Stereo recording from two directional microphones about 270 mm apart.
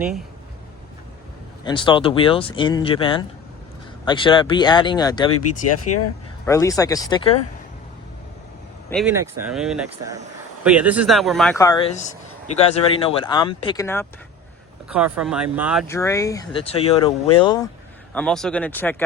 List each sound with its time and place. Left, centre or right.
0.0 s speech: centre
1.6 s speech: centre
5.3 s speech: left
6.4 s speech: centre
8.9 s speech: centre
12.5 s speech: left
14.8 s speech: centre
15.9 s speech: centre
18.1 s speech: centre